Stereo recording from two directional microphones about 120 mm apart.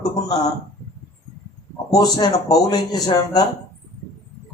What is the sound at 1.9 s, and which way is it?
Speech, 35° left (ahead or behind).